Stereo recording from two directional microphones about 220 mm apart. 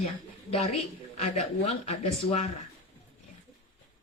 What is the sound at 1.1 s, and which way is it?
Speech, 30° left (ahead or behind).